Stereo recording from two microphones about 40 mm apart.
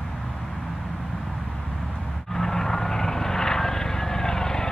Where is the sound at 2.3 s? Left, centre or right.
Centre.